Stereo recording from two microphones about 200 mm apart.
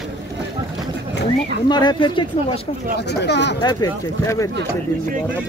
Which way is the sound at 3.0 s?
60° left (ahead or behind).